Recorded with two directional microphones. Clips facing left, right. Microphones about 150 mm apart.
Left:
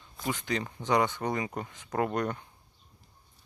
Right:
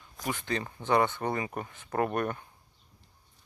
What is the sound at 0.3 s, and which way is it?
Speech, 15° left (ahead or behind).